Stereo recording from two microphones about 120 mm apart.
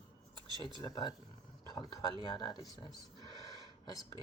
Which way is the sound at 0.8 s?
35° left (ahead or behind).